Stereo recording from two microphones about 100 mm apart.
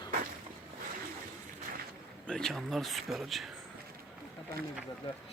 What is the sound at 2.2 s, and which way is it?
Speech, 5° left (ahead or behind).